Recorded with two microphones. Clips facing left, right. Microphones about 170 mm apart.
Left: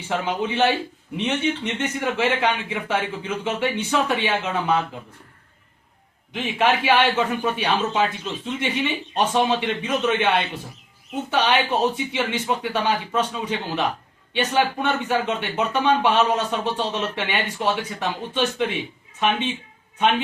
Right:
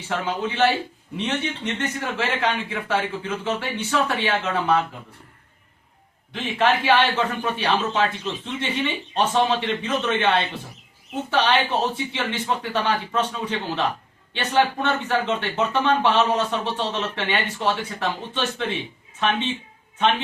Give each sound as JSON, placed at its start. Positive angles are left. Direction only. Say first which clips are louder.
{"t": 0.1, "sound": "speech", "louder": "left 2 dB", "side_deg": 20}
{"t": 6.3, "sound": "speech", "louder": "even", "side_deg": 15}